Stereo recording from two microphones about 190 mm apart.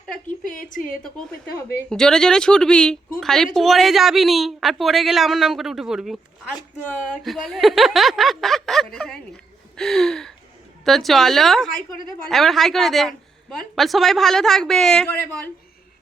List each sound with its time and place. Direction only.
0.5 s a woman's voice: 45° left (ahead or behind)
1.9 s a woman's voice: 5° left (ahead or behind)